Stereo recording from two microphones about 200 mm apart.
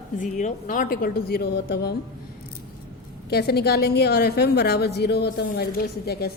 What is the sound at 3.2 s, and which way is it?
A woman's voice, 50° left (ahead or behind).